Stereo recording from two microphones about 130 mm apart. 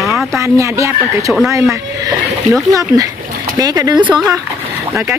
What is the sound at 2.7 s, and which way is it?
Speech, 25° right (ahead or behind).